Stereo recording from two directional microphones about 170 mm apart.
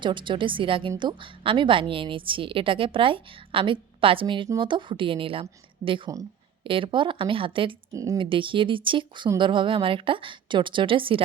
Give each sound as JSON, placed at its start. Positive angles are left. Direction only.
{"t": 0.0, "sound": "a woman's voice", "side_deg": -30}
{"t": 7.9, "sound": "speech", "side_deg": -20}
{"t": 8.2, "sound": "speech", "side_deg": -30}